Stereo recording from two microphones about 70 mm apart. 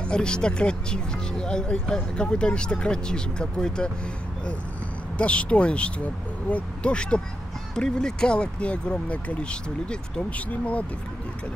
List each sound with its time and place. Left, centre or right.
0.0 s speech: centre
5.1 s speech: centre